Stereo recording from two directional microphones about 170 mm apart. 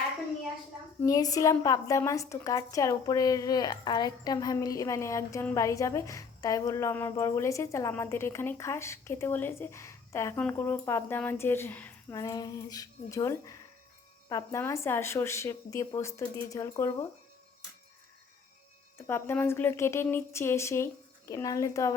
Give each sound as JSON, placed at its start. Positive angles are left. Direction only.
{"t": 1.0, "sound": "a woman's voice", "side_deg": 20}
{"t": 12.1, "sound": "a woman's voice", "side_deg": 20}
{"t": 18.9, "sound": "a woman's voice", "side_deg": 15}